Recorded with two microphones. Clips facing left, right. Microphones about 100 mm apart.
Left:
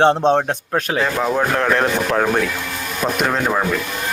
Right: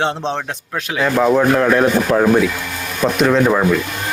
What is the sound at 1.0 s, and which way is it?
A man's voice, 5° right (ahead or behind).